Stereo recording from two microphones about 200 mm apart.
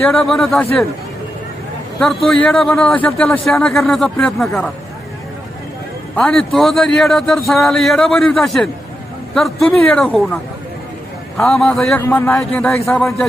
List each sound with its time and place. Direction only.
0.0 s a man's voice: centre (ahead or behind)
2.0 s a man's voice: centre (ahead or behind)
6.1 s a man's voice: centre (ahead or behind)